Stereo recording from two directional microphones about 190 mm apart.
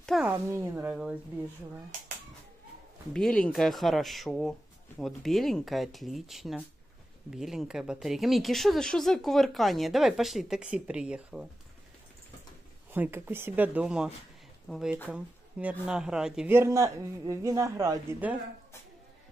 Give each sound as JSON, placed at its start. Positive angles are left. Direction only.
{"t": 0.0, "sound": "a sound", "side_deg": 0}
{"t": 0.3, "sound": "a woman's voice", "side_deg": -15}
{"t": 3.1, "sound": "speech", "side_deg": 5}
{"t": 12.9, "sound": "a woman's voice", "side_deg": -10}